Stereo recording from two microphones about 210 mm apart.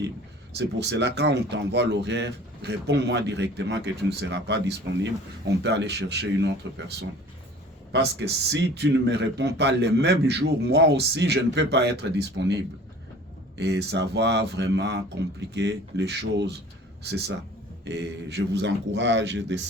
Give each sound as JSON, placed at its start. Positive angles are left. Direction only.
{"t": 0.5, "sound": "a man's voice", "side_deg": -55}
{"t": 7.9, "sound": "a man's voice", "side_deg": -55}